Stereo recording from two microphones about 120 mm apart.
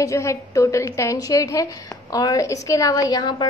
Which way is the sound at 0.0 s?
25° left (ahead or behind).